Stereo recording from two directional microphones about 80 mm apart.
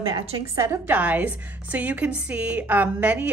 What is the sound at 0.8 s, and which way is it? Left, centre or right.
A woman's voice, right.